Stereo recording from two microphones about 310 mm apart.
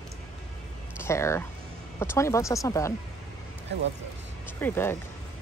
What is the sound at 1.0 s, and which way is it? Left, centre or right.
Speech, centre.